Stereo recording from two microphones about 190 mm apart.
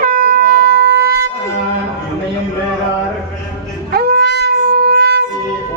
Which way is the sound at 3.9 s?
60° right (ahead or behind).